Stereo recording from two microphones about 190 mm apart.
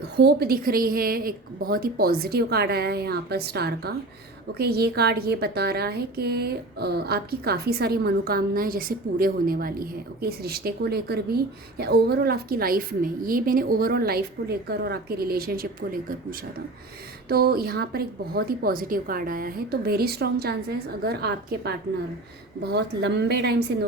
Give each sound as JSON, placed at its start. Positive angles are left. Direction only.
{"t": 0.0, "sound": "a woman's voice", "side_deg": -55}
{"t": 17.2, "sound": "a woman's voice", "side_deg": -55}